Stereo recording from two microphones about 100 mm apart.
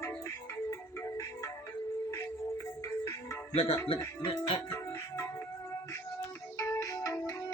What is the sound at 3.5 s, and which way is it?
Speech, 85° left.